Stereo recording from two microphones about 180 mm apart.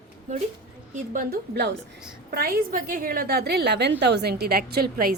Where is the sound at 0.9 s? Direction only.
50° right (ahead or behind).